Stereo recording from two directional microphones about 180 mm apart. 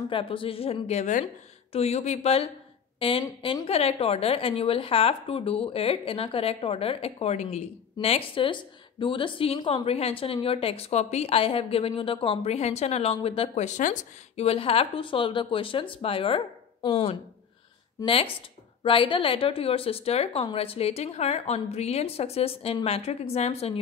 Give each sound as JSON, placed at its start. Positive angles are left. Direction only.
{"t": 0.1, "sound": "a woman's voice", "side_deg": 30}